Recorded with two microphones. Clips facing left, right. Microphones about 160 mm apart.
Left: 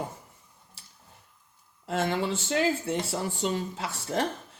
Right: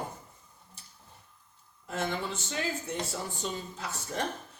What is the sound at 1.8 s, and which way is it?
Speech, 90° left.